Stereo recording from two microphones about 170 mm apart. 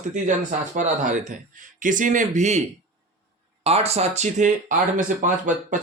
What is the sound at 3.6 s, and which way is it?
Speech, 35° right (ahead or behind).